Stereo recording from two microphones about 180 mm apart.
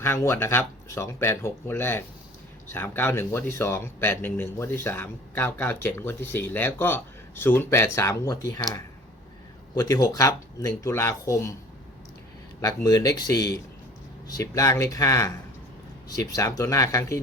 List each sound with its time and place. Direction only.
0.0 s speech: 15° left (ahead or behind)
12.6 s speech: 20° left (ahead or behind)